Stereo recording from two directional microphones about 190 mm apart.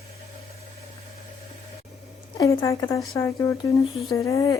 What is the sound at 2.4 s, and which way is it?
Speech, 15° left (ahead or behind).